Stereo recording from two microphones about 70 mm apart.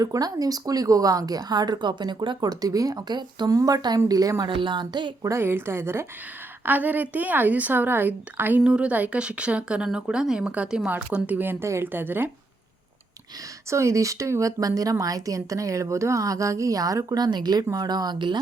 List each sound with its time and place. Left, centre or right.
0.0 s a woman's voice: right
5.2 s a woman's voice: right
6.7 s a woman's voice: right
8.6 s a woman's voice: centre; by 12.3 s right
13.7 s speech: right